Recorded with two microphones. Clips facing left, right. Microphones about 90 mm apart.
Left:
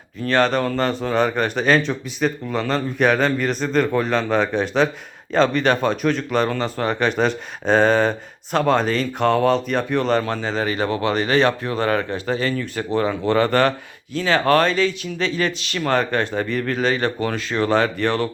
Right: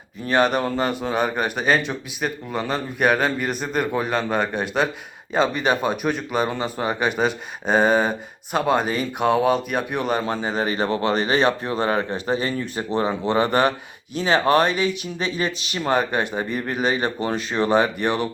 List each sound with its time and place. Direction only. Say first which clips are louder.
0.3 s speech: left 1 dB; 15° right (ahead or behind)